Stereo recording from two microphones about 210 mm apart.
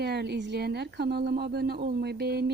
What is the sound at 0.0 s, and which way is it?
A woman's voice, 50° right (ahead or behind).